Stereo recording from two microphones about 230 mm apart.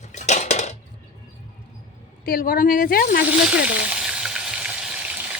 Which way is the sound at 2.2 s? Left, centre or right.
Left.